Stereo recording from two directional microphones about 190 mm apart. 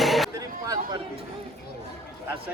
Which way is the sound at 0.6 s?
20° right (ahead or behind).